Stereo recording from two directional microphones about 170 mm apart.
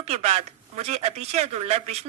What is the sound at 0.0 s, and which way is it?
A man's voice, 40° right (ahead or behind).